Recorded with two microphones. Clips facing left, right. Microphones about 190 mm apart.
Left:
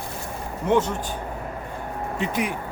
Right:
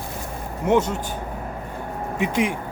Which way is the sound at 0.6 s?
10° right (ahead or behind).